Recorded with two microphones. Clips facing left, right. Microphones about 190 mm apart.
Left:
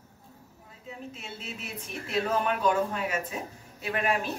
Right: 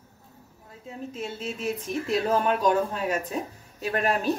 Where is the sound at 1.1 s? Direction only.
40° right (ahead or behind).